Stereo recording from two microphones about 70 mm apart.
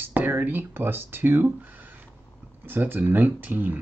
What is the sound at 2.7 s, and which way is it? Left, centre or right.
Speech, right.